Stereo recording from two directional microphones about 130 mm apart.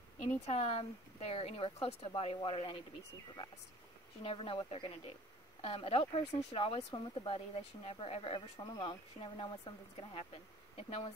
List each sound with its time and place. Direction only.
0.5 s speech: 50° left (ahead or behind)
4.2 s speech: 45° left (ahead or behind)